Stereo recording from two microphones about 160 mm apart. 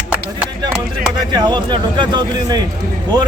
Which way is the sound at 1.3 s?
25° right (ahead or behind).